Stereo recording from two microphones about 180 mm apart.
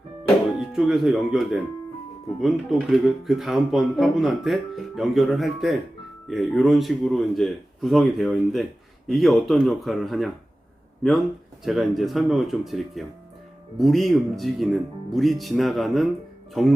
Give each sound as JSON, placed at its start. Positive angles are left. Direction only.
{"t": 0.6, "sound": "speech", "side_deg": 0}